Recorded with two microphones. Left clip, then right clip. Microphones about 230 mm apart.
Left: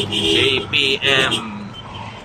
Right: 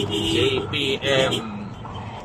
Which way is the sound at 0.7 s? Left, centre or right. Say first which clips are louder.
Left 6 dB; centre.